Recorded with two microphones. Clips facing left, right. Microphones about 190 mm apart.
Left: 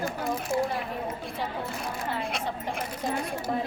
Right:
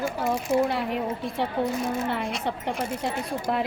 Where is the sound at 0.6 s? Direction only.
75° right (ahead or behind).